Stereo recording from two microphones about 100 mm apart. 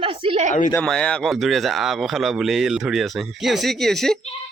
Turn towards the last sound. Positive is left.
turn(degrees=5)  # may be behind; listen again after turning